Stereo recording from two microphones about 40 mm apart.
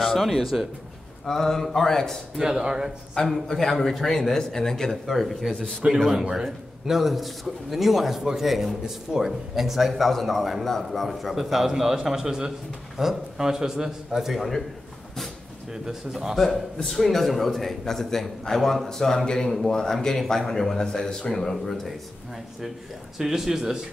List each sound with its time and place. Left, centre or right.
0.0 s a man's voice: centre
1.2 s a man's voice: centre
2.4 s a man's voice: centre
3.3 s a man's voice: centre
5.1 s a man's voice: centre
6.3 s a man's voice: centre
11.1 s a man's voice: centre
15.7 s a man's voice: centre
16.3 s a man's voice: centre
23.1 s a man's voice: centre